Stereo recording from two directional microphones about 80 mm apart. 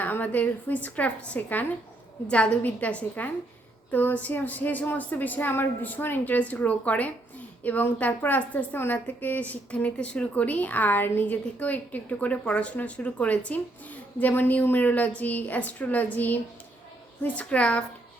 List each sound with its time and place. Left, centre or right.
0.0 s a woman's voice: left